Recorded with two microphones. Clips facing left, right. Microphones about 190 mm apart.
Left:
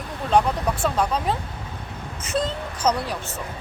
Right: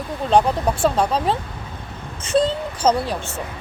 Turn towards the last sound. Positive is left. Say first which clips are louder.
# right 4 dB
turn(degrees=-30)  # may be behind; listen again after turning